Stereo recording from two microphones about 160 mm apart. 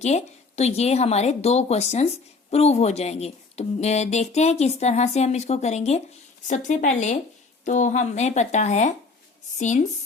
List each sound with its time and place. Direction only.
0.0 s speech: 45° left (ahead or behind)